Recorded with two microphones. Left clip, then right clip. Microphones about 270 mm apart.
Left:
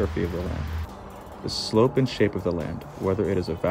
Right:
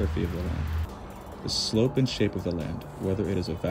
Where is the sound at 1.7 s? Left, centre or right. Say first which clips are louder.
Left 7 dB; centre.